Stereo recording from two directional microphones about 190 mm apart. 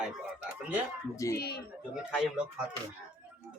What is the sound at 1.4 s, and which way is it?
Speech, 55° left (ahead or behind).